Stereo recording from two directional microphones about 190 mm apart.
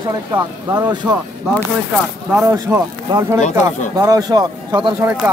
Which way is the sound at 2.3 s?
15° right (ahead or behind).